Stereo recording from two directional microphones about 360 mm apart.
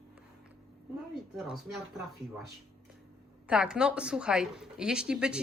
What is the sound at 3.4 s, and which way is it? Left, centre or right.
A woman's voice, centre.